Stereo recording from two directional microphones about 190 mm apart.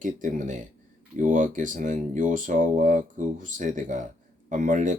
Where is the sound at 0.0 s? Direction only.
40° right (ahead or behind).